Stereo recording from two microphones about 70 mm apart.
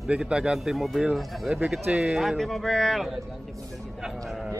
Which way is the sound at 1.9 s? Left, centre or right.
Centre.